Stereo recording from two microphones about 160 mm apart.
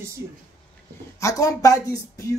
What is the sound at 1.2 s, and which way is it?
Speech, 20° left (ahead or behind).